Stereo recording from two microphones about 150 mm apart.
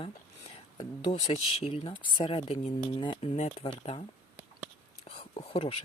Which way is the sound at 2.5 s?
50° left (ahead or behind).